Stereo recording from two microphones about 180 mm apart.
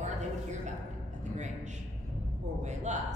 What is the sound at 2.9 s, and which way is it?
Speech, 40° right (ahead or behind).